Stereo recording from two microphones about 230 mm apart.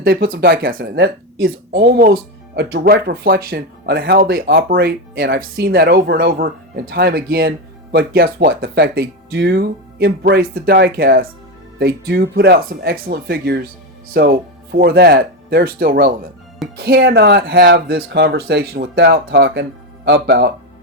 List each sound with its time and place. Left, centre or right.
0.0 s speech: right